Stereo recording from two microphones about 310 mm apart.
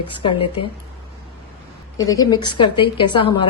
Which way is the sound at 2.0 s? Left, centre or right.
Centre.